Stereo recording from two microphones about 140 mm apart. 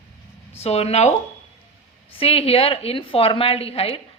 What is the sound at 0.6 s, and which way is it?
A woman's voice, 45° left (ahead or behind).